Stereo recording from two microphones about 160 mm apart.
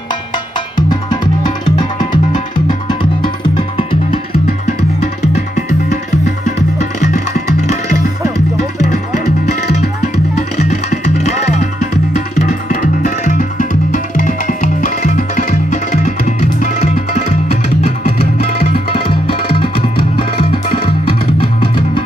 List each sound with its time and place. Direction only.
2.0 s music: 55° left (ahead or behind)
3.5 s music: 30° left (ahead or behind)
12.6 s music: 55° left (ahead or behind)
18.6 s music: 35° left (ahead or behind)